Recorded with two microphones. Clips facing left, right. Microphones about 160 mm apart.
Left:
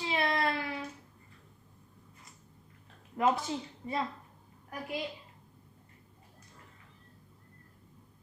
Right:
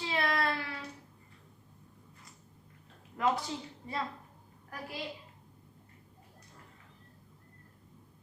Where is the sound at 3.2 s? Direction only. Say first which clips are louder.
Left 2 dB; 20° left (ahead or behind).